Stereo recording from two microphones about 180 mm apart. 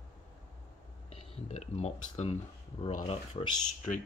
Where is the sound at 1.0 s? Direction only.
35° left (ahead or behind).